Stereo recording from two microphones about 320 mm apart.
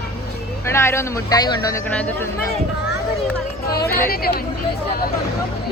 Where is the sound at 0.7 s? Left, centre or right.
Centre.